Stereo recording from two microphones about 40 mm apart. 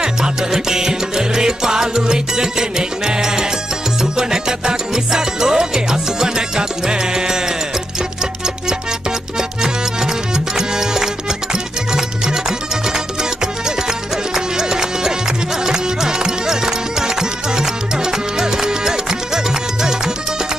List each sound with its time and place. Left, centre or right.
0.0 s music: centre
10.3 s music: centre